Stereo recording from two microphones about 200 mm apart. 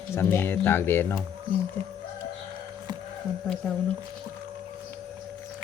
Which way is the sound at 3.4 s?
5° left (ahead or behind).